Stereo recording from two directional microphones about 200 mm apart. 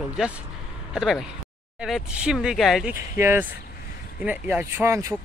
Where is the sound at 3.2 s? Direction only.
10° right (ahead or behind).